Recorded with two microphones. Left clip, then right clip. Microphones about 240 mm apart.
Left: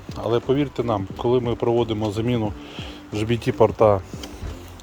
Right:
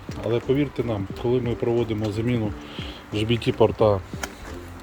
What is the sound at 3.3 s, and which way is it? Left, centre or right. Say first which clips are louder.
Speech: left 2 dB; left.